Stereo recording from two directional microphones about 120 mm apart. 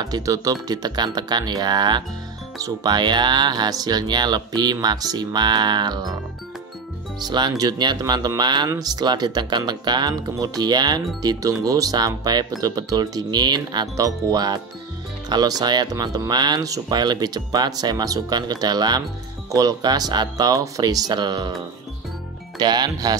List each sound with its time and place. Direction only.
0.0 s speech: 30° right (ahead or behind)
7.2 s speech: 35° right (ahead or behind)
22.6 s speech: 35° right (ahead or behind)